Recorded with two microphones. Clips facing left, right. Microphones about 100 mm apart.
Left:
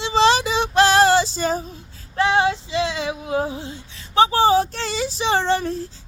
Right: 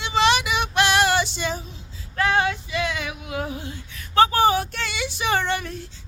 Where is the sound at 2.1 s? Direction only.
25° left (ahead or behind).